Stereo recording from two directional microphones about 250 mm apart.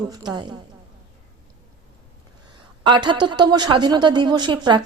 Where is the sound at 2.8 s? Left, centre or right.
Centre.